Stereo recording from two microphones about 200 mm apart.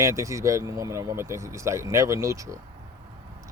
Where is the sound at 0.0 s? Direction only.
15° right (ahead or behind).